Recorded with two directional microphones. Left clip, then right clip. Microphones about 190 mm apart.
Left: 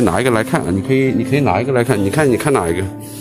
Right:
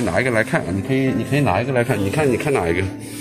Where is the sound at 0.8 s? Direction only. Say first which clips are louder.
Left 5 dB; 35° left (ahead or behind).